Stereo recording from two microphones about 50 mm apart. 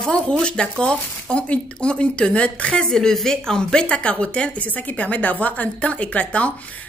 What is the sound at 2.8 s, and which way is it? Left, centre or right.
Speech, centre.